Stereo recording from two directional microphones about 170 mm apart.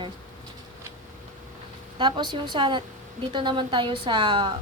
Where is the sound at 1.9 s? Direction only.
30° right (ahead or behind).